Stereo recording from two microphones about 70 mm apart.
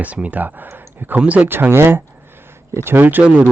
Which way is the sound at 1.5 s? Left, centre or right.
Right.